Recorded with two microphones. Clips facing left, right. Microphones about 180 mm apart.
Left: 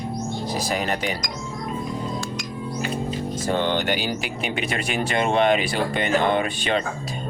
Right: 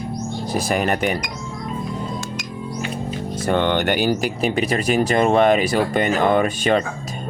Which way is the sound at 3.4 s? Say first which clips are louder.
Right 5 dB; 60° right (ahead or behind).